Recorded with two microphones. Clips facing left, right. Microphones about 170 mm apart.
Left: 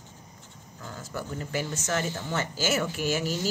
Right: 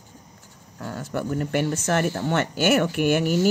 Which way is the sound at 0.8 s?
65° right (ahead or behind).